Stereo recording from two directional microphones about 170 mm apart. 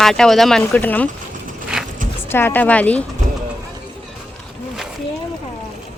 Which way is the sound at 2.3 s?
15° left (ahead or behind).